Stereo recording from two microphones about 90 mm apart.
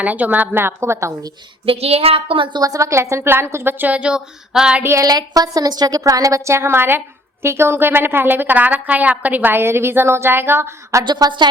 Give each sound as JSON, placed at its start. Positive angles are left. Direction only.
{"t": 0.0, "sound": "a woman's voice", "side_deg": -15}
{"t": 1.6, "sound": "speech", "side_deg": -90}
{"t": 2.6, "sound": "a woman's voice", "side_deg": -40}
{"t": 4.8, "sound": "a woman's voice", "side_deg": -30}
{"t": 5.0, "sound": "a woman's voice", "side_deg": -45}
{"t": 11.0, "sound": "a woman's voice", "side_deg": -55}